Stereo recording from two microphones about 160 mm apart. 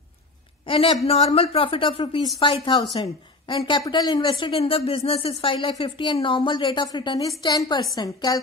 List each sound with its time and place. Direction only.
0.7 s a woman's voice: 35° left (ahead or behind)